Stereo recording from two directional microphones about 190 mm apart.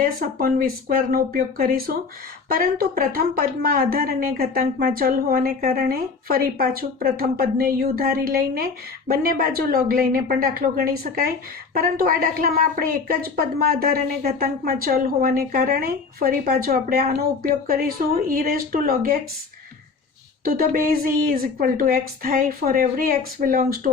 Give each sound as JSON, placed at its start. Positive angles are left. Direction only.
{"t": 0.0, "sound": "speech", "side_deg": -50}
{"t": 20.4, "sound": "speech", "side_deg": -50}